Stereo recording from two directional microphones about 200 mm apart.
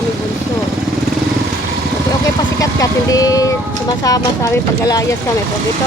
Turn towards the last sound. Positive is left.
turn(degrees=15)  # may be behind; listen again after turning